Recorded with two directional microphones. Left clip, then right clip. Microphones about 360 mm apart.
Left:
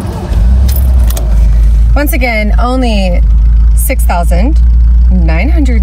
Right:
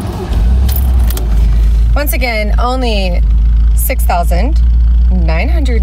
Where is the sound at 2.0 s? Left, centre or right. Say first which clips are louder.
Left 3 dB; centre.